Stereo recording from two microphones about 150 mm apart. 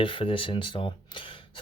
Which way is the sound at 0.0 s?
35° left (ahead or behind).